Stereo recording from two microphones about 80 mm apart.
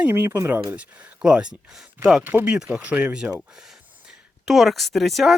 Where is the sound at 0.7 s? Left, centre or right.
Centre.